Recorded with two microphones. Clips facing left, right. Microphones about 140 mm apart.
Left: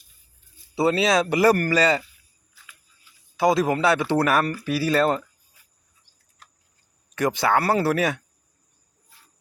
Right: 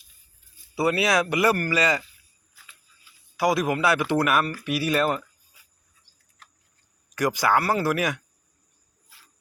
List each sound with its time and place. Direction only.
0.8 s speech: 25° left (ahead or behind)
3.3 s speech: 25° left (ahead or behind)
7.2 s speech: 25° left (ahead or behind)
9.0 s cricket: 80° right